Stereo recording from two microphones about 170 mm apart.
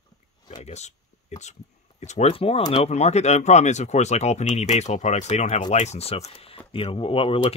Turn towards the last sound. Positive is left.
turn(degrees=30)  # may be behind; listen again after turning